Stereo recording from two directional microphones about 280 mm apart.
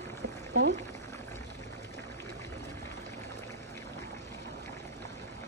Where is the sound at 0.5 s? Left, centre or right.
Right.